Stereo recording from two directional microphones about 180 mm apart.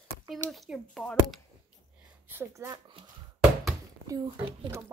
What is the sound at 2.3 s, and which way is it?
Speech, 15° right (ahead or behind).